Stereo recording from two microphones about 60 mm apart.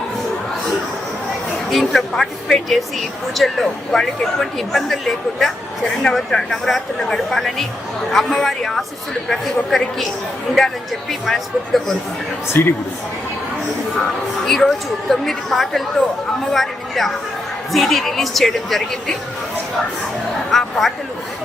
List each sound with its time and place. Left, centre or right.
1.7 s speech: centre
11.1 s speech: centre
12.5 s speech: left
14.4 s speech: centre
20.5 s speech: centre